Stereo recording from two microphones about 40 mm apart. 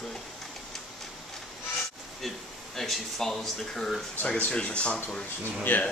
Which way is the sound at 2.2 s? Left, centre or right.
Centre.